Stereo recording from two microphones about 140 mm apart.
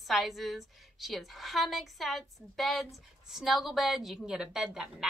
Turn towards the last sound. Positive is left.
turn(degrees=-5)  # may be behind; listen again after turning